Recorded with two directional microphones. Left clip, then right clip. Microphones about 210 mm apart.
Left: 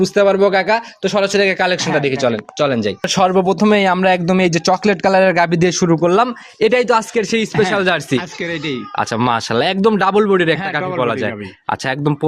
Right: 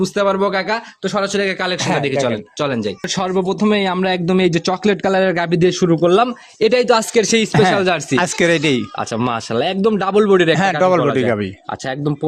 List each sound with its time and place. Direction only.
0.0 s speech: 15° left (ahead or behind); by 7.5 s 10° right (ahead or behind)
7.6 s speech: centre (ahead or behind)
8.1 s speech: 55° right (ahead or behind)
9.0 s speech: 5° left (ahead or behind)
11.0 s speech: 15° left (ahead or behind)